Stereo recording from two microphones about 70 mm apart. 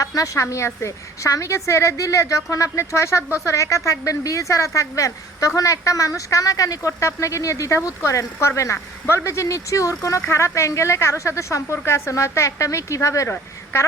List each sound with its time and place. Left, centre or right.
0.0 s a woman's voice: left
0.5 s a woman's voice: left